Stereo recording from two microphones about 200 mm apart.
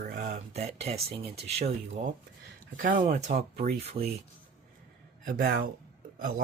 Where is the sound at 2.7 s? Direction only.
40° right (ahead or behind).